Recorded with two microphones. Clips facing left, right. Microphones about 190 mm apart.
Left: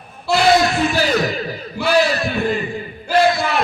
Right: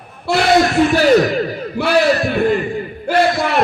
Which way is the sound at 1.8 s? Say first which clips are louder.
Right 2 dB; 60° right (ahead or behind).